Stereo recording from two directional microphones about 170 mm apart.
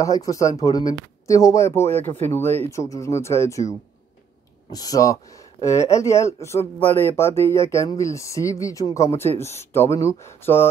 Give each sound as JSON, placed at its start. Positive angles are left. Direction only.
{"t": 0.0, "sound": "speech", "side_deg": 20}